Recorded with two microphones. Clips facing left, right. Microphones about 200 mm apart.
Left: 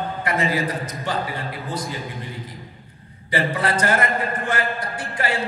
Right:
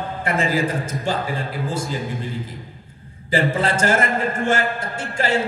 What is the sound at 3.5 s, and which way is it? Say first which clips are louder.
A man's voice: right 1 dB; 25° right (ahead or behind).